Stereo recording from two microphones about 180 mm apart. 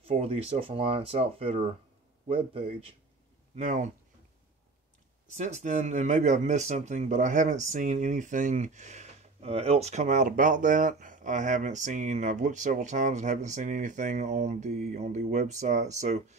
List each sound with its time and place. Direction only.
0.0 s speech: 30° right (ahead or behind)
3.5 s speech: 40° right (ahead or behind)
5.3 s speech: 40° right (ahead or behind)